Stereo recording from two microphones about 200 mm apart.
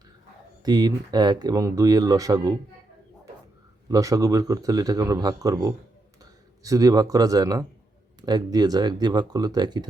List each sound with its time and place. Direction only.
0.6 s speech: 20° right (ahead or behind)
3.8 s speech: 15° right (ahead or behind)